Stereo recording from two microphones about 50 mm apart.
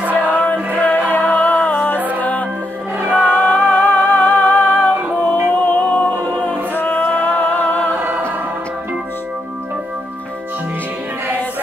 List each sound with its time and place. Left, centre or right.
0.1 s music: left
3.1 s music: centre
6.7 s music: left